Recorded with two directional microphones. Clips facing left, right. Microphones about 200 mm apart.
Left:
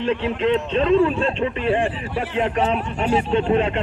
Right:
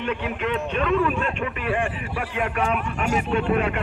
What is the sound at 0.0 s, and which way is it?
A man's voice, 30° left (ahead or behind).